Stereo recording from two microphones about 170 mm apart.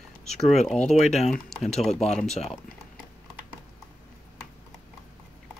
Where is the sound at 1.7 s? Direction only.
Centre (ahead or behind).